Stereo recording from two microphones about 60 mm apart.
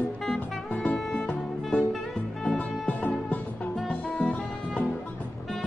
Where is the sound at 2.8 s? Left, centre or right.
Left.